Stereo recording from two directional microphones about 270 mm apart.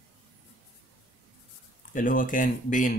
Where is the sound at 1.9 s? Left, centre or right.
Left.